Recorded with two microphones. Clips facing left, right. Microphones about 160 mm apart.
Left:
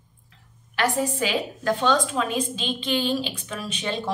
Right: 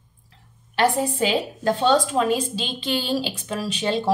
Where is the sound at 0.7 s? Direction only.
30° right (ahead or behind).